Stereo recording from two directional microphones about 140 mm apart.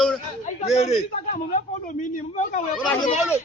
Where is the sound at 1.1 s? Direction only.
60° left (ahead or behind).